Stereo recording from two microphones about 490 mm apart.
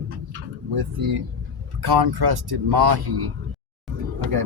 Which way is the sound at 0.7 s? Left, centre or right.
Right.